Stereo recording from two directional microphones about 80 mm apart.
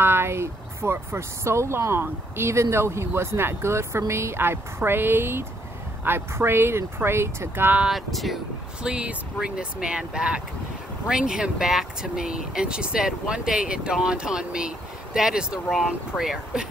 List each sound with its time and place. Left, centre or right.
0.0 s speech: right
7.8 s speech: centre
8.8 s speech: centre